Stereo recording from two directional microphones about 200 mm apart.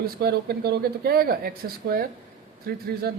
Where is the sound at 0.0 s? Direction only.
50° right (ahead or behind).